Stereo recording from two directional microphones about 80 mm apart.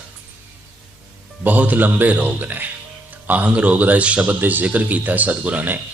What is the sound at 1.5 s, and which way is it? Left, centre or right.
A man's voice, right.